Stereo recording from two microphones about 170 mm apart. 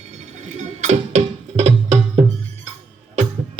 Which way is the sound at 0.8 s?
45° right (ahead or behind).